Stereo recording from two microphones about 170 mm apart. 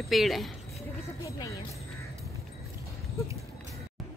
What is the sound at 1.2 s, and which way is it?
Speech, 20° left (ahead or behind).